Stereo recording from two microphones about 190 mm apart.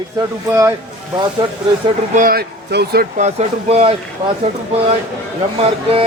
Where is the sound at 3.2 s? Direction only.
35° right (ahead or behind).